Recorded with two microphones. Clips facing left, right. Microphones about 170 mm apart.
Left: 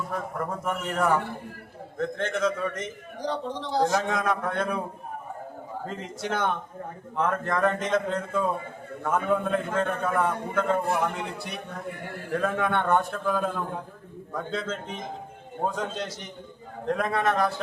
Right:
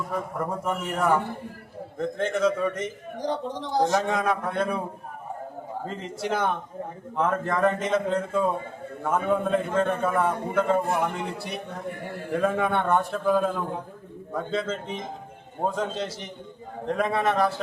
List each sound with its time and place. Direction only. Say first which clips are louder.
0.1 s a man's voice: right 2 dB; 5° right (ahead or behind)
3.2 s speech: right 1 dB; 20° right (ahead or behind)
3.8 s a man's voice: right 2 dB; centre (ahead or behind)
5.9 s a man's voice: right 2 dB; centre (ahead or behind)